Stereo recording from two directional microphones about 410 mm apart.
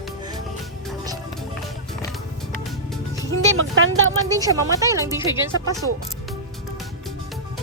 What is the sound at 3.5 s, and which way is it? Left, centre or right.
Speech, right.